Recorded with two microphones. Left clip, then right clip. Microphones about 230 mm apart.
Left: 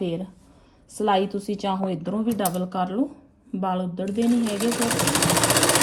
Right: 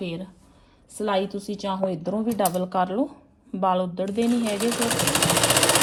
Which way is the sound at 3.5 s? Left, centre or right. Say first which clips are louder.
Right 4 dB; right.